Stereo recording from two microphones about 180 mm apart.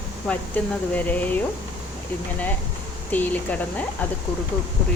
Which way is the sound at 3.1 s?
10° left (ahead or behind).